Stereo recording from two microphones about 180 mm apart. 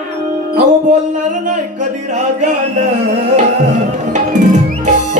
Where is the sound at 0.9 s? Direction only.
45° right (ahead or behind).